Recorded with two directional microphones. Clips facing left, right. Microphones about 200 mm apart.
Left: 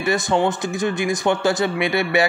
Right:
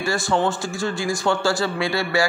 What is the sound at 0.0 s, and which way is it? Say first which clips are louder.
A man's voice: left 2 dB; 20° left (ahead or behind).